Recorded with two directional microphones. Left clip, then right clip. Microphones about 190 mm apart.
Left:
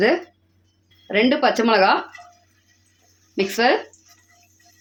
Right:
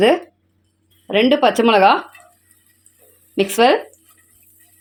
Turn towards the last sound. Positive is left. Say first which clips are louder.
# right 5 dB
turn(degrees=-35)  # may be behind; listen again after turning